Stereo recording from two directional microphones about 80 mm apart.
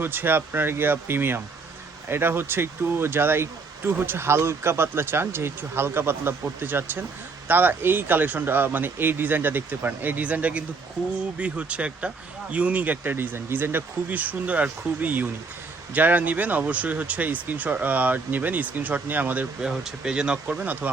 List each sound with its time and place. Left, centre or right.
0.0 s speech: right